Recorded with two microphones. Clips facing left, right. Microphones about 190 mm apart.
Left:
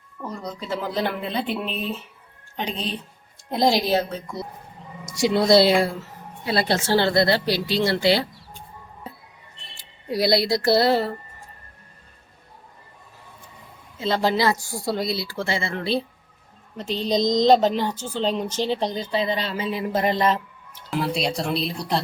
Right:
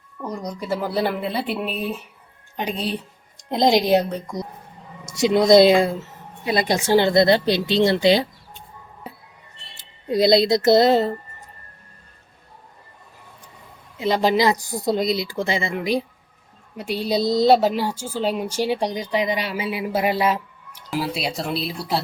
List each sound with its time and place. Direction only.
0.2 s speech: 15° right (ahead or behind)
9.7 s speech: 20° right (ahead or behind)
14.0 s speech: 15° right (ahead or behind)